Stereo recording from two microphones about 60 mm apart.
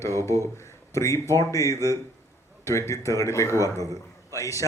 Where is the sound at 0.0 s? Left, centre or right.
Left.